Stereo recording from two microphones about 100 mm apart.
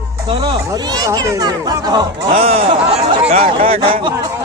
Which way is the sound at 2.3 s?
90° right.